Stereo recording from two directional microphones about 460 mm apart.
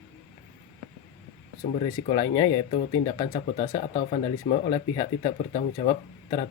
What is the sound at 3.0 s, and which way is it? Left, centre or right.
Speech, centre.